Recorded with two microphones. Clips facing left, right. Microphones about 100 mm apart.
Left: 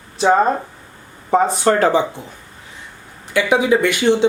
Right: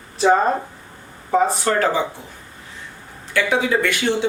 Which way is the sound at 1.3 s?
25° left (ahead or behind).